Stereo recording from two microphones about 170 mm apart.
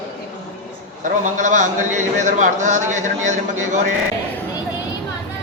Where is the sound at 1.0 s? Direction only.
50° right (ahead or behind).